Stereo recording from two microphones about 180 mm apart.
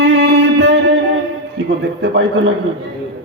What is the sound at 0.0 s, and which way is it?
Music, 70° right (ahead or behind).